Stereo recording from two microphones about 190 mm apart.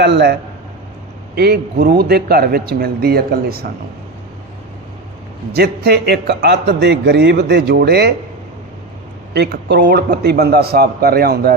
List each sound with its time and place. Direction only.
0.0 s speech: 60° right (ahead or behind)
1.4 s speech: 60° right (ahead or behind)
5.5 s speech: 60° right (ahead or behind)
9.3 s speech: 60° right (ahead or behind)